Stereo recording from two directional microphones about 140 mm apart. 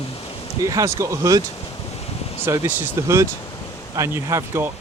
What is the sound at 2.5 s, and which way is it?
Speech, 15° right (ahead or behind).